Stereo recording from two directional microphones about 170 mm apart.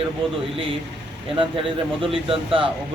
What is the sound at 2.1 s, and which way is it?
Speech, 30° right (ahead or behind).